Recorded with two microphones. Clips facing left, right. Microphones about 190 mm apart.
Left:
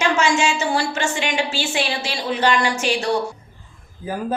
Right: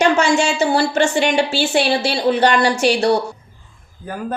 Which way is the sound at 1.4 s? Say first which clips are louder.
Right 6 dB; 65° right (ahead or behind).